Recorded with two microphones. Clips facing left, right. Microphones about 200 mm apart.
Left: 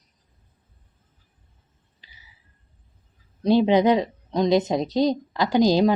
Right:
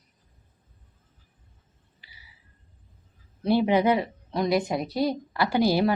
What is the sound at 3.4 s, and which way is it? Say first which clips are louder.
A woman's voice: left 4 dB; 15° left (ahead or behind).